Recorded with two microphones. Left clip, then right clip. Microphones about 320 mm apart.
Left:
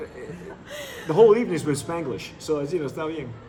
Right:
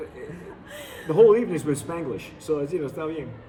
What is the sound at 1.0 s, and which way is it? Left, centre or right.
Speech, centre.